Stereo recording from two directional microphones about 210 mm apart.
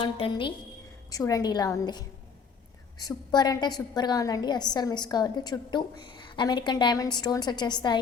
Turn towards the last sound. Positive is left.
turn(degrees=20)  # may be behind; listen again after turning